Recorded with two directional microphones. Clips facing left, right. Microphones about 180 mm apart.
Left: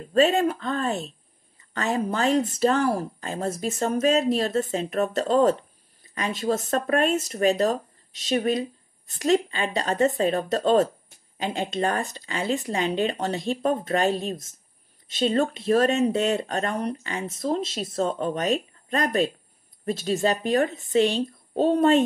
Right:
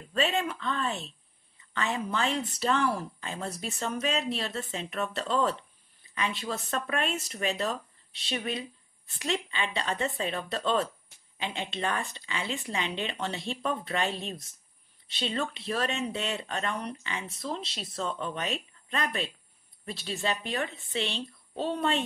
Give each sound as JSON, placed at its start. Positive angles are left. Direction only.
{"t": 0.0, "sound": "speech", "side_deg": 40}